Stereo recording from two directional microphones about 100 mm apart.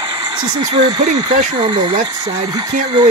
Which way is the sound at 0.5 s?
50° right (ahead or behind).